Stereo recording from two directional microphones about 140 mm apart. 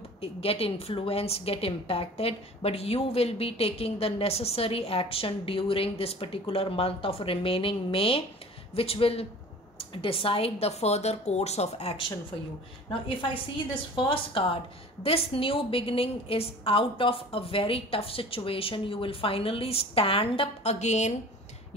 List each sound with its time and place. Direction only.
0.2 s a woman's voice: 45° left (ahead or behind)
13.9 s a woman's voice: 40° left (ahead or behind); by 21.1 s 55° left (ahead or behind)